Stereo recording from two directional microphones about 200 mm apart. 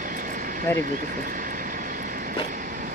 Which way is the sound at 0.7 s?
10° left (ahead or behind).